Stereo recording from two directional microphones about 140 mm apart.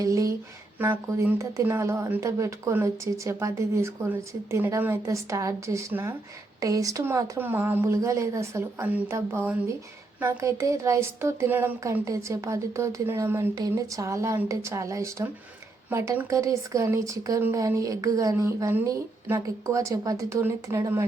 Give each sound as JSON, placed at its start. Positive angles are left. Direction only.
{"t": 0.0, "sound": "speech", "side_deg": -25}